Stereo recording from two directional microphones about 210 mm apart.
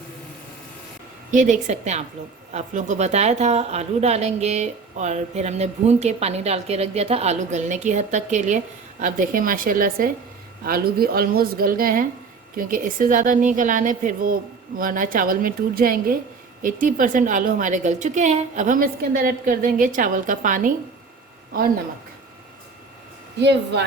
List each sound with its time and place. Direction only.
1.3 s a woman's voice: 35° right (ahead or behind)
23.4 s speech: 55° right (ahead or behind)